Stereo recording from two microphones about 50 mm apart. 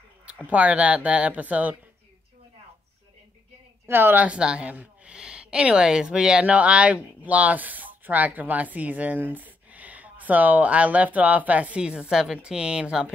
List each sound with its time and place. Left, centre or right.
0.5 s speech: right
3.9 s a woman's voice: right
4.2 s a woman's voice: centre
11.8 s speech: centre